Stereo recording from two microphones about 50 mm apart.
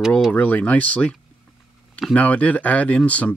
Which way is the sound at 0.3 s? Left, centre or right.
Left.